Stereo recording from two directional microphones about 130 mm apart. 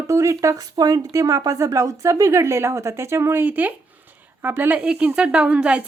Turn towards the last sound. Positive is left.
turn(degrees=-10)  # may be behind; listen again after turning